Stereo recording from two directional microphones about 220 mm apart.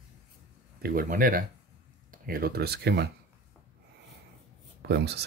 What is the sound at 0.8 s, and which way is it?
Speech, 40° right (ahead or behind).